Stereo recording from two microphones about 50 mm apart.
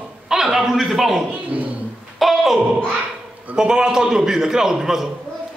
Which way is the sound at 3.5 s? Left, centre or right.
Centre.